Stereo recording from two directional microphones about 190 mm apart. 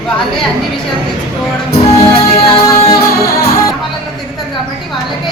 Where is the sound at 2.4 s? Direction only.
25° left (ahead or behind).